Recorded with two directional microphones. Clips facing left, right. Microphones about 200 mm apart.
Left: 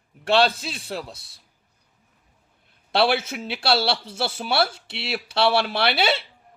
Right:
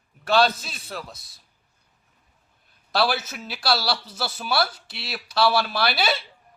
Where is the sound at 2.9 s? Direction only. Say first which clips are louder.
Left 3 dB; 25° left (ahead or behind).